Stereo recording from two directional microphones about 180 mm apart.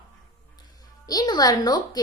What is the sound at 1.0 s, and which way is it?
Speech, 20° left (ahead or behind).